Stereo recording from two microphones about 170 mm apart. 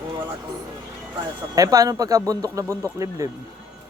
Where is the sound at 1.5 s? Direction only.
20° right (ahead or behind).